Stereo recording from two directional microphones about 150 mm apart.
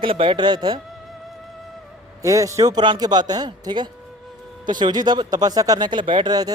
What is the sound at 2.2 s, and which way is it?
Speech, 20° right (ahead or behind).